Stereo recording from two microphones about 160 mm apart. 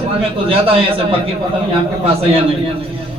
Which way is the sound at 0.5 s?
35° right (ahead or behind).